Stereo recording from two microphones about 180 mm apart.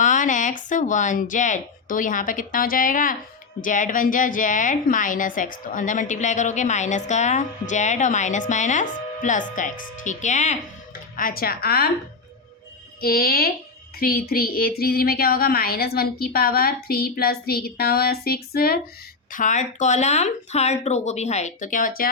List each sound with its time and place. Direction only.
0.0 s a woman's voice: 45° left (ahead or behind)
11.2 s speech: 55° left (ahead or behind)
13.0 s speech: 55° left (ahead or behind)
19.3 s speech: 45° left (ahead or behind)